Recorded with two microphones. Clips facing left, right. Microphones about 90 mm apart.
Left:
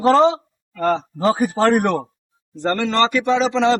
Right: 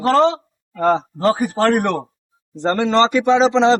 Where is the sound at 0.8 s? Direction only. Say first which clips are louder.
Right 3 dB; 15° right (ahead or behind).